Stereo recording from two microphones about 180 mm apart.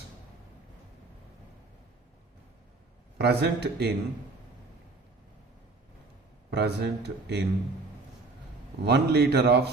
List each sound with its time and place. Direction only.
3.2 s speech: 65° right (ahead or behind)
6.5 s speech: 70° right (ahead or behind)
8.8 s speech: 65° right (ahead or behind)